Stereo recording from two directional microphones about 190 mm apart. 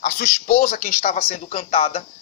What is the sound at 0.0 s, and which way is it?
Speech, 45° left (ahead or behind).